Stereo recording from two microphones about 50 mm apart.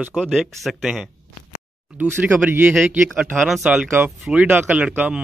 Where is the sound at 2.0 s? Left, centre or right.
Right.